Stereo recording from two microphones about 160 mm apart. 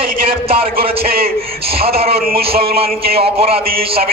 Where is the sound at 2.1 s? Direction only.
70° right (ahead or behind).